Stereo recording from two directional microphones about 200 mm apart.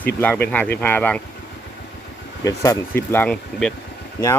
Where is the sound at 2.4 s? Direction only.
15° left (ahead or behind).